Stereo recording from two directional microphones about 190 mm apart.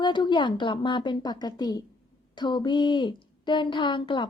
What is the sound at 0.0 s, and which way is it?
Speech, 25° left (ahead or behind).